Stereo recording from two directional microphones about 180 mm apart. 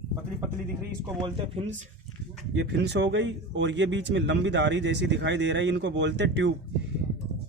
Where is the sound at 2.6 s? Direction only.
70° right (ahead or behind).